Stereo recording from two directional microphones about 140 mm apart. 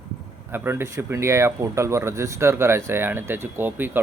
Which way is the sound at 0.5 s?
15° right (ahead or behind).